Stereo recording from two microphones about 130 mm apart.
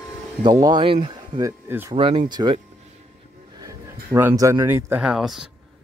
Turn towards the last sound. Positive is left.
turn(degrees=-5)  # may be behind; listen again after turning